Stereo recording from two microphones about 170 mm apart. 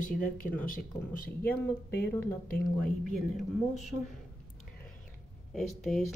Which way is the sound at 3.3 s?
40° left (ahead or behind).